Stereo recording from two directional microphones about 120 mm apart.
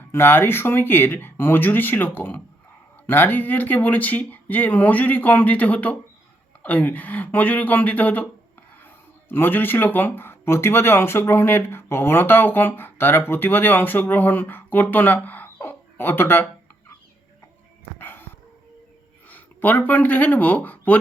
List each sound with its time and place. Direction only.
0.1 s speech: 20° left (ahead or behind)
9.3 s speech: 15° left (ahead or behind)
18.0 s dog: 20° left (ahead or behind)
19.3 s speech: 15° left (ahead or behind)